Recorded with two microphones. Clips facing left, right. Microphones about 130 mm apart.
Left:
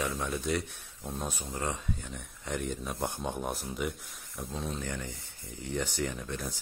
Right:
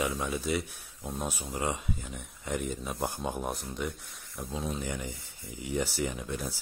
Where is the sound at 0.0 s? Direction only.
5° right (ahead or behind).